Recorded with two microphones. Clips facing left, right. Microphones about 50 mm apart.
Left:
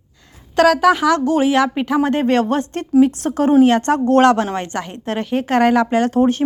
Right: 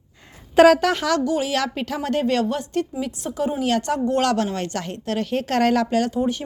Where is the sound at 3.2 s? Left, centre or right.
Left.